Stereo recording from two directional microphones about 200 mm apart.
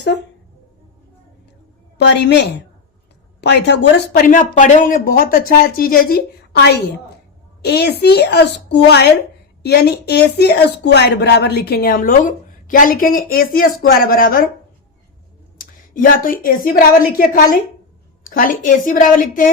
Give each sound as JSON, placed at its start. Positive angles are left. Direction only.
{"t": 2.0, "sound": "a woman's voice", "side_deg": 60}
{"t": 4.3, "sound": "a woman's voice", "side_deg": 40}
{"t": 15.5, "sound": "a woman's voice", "side_deg": 45}